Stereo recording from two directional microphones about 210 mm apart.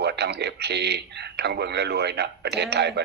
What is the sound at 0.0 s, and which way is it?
Speech, 50° right (ahead or behind).